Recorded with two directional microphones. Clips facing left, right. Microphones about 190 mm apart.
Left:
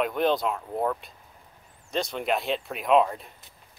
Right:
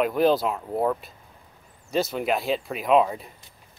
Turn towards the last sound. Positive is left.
turn(degrees=0)  # may be behind; listen again after turning